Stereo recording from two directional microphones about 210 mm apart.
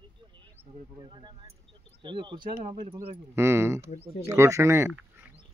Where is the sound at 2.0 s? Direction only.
20° right (ahead or behind); by 5.3 s 5° right (ahead or behind).